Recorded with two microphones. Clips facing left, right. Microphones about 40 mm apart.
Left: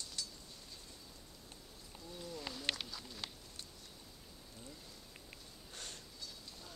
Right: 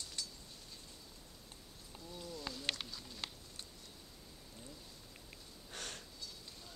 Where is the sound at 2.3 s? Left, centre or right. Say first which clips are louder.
Left 1 dB; centre.